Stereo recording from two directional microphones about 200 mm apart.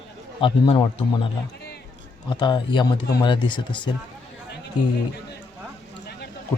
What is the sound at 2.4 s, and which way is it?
Speech, 25° left (ahead or behind).